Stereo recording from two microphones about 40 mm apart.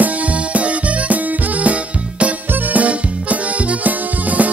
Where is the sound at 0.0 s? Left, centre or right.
Right.